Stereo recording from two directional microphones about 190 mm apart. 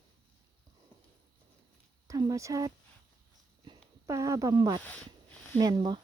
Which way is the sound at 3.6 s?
15° right (ahead or behind).